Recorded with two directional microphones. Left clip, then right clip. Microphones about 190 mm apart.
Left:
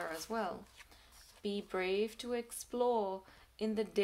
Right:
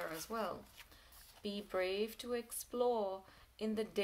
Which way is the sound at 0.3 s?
30° left (ahead or behind).